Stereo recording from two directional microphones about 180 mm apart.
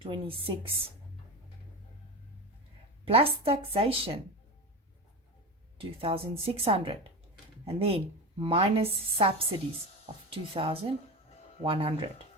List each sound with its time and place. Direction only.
0.0 s speech: 30° right (ahead or behind)
3.0 s a woman's voice: 30° right (ahead or behind)
5.7 s a woman's voice: 30° right (ahead or behind)